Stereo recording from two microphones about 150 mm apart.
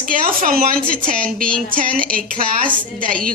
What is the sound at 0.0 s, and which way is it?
A woman's voice, 65° right (ahead or behind).